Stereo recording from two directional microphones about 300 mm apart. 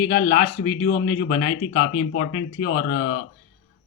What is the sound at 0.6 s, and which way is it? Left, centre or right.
Speech, left.